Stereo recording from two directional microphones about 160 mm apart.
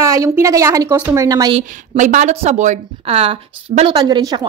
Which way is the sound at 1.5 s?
50° right (ahead or behind).